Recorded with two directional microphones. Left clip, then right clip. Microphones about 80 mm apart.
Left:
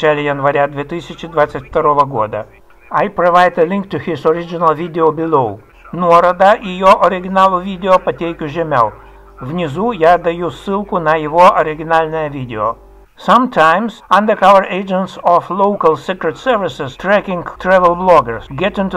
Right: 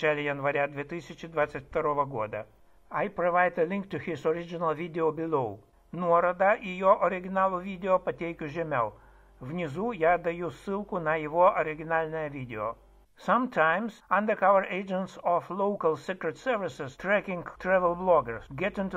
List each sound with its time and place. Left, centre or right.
0.0 s speech: right
6.0 s speech: right
6.4 s speech: right